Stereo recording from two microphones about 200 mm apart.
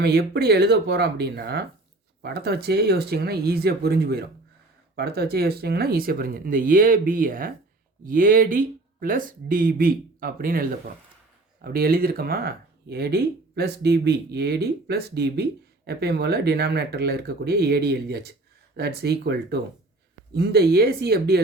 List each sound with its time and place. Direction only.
0.0 s speech: 55° right (ahead or behind)